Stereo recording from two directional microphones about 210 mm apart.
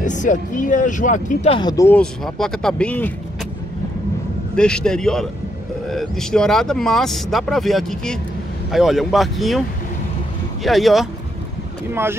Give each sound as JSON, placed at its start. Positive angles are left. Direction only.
{"t": 0.0, "sound": "speech", "side_deg": 35}
{"t": 1.5, "sound": "speech", "side_deg": 20}
{"t": 2.0, "sound": "speech", "side_deg": 0}
{"t": 4.6, "sound": "speech", "side_deg": 5}
{"t": 10.6, "sound": "speech", "side_deg": 0}
{"t": 11.9, "sound": "speech", "side_deg": -10}